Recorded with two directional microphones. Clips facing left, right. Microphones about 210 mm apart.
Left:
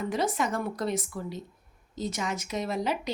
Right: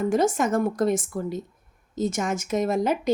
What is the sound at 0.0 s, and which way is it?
A woman's voice, 45° right (ahead or behind).